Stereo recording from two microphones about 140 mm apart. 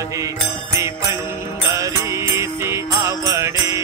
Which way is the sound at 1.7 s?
20° right (ahead or behind).